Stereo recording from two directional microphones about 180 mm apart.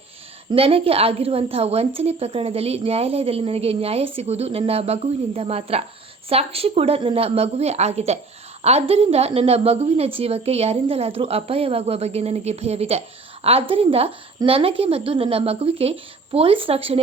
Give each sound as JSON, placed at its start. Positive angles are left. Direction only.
{"t": 0.5, "sound": "a woman's voice", "side_deg": -30}